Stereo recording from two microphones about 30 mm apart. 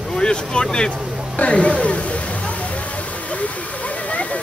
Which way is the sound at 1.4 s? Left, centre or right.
Left.